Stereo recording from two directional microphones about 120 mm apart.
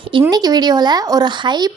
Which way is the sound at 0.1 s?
35° right (ahead or behind).